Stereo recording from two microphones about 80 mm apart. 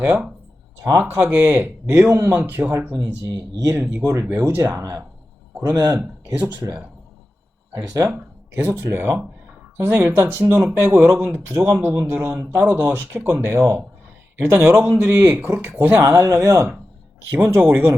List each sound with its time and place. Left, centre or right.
0.9 s speech: right
3.5 s speech: right
3.8 s speech: right
4.7 s speech: right
7.8 s speech: right
8.1 s a sound: right
8.8 s speech: right
16.0 s speech: right